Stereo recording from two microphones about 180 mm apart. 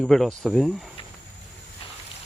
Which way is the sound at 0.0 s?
Centre (ahead or behind).